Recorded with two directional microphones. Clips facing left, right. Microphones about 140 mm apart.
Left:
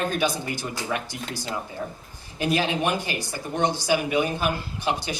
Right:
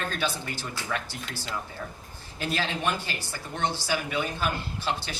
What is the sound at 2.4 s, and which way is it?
Speech, 15° left (ahead or behind).